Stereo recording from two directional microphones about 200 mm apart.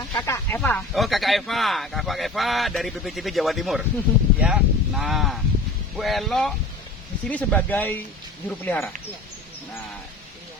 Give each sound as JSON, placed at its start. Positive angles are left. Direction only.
{"t": 0.1, "sound": "speech", "side_deg": 15}
{"t": 0.9, "sound": "speech", "side_deg": 0}